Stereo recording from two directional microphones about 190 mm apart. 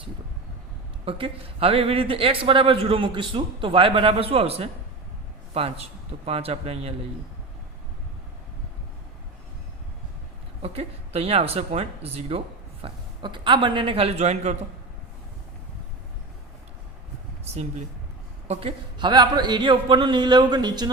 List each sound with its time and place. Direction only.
1.0 s speech: 30° right (ahead or behind)
10.6 s speech: 30° right (ahead or behind)
17.4 s speech: 35° right (ahead or behind)